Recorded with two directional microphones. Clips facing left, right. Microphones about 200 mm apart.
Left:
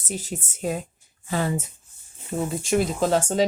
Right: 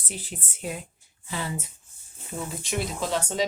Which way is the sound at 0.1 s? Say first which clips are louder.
Left 7 dB; 45° left (ahead or behind).